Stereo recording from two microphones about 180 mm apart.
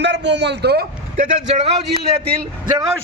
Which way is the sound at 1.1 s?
40° right (ahead or behind).